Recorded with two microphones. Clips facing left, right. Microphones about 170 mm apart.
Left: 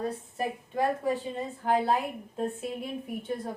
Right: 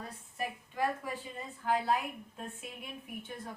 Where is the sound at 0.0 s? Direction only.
35° left (ahead or behind).